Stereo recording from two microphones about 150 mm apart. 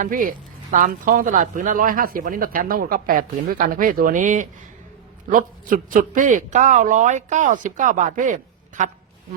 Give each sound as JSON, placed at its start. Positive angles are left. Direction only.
{"t": 0.0, "sound": "a man's voice", "side_deg": -65}